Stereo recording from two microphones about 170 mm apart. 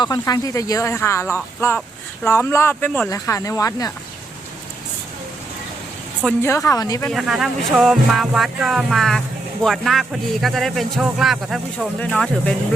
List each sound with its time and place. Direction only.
0.0 s speech: 20° left (ahead or behind)
3.1 s speech: 20° left (ahead or behind)
6.4 s speech: 15° left (ahead or behind)
7.1 s speech: centre (ahead or behind)